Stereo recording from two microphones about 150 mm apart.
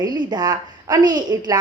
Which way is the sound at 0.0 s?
25° right (ahead or behind).